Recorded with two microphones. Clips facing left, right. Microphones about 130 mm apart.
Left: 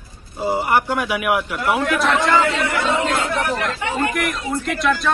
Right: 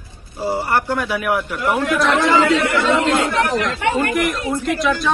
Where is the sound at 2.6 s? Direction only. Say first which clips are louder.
Right 3 dB; 80° right.